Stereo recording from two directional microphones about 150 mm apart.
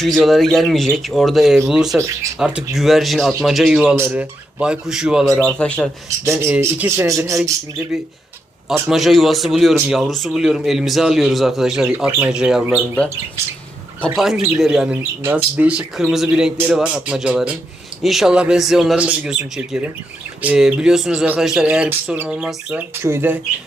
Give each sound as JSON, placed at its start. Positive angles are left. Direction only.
{"t": 0.0, "sound": "a man's voice", "side_deg": 0}
{"t": 5.4, "sound": "speech", "side_deg": 10}
{"t": 6.3, "sound": "speech", "side_deg": -15}
{"t": 8.9, "sound": "a man's voice", "side_deg": 0}
{"t": 14.2, "sound": "a man's voice", "side_deg": 0}